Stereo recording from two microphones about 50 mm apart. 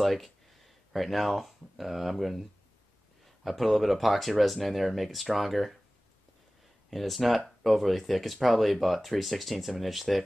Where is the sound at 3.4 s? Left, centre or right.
Centre.